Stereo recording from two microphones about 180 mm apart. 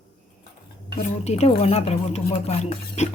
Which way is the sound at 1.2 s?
35° left (ahead or behind).